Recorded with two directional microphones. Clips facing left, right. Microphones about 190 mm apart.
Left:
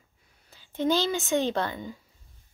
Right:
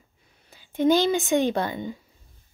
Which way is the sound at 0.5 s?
15° right (ahead or behind).